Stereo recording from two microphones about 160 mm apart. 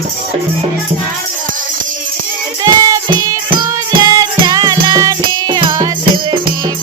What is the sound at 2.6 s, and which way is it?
Music, 20° right (ahead or behind).